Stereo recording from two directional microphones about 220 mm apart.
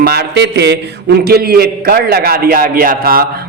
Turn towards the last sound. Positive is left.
turn(degrees=-40)  # may be behind; listen again after turning